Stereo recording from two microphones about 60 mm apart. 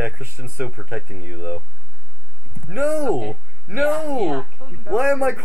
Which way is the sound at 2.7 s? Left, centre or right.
Right.